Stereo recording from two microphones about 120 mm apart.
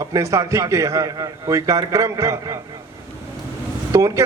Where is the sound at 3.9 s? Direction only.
25° right (ahead or behind).